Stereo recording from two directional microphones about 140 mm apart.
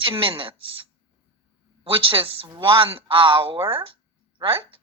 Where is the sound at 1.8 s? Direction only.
40° right (ahead or behind).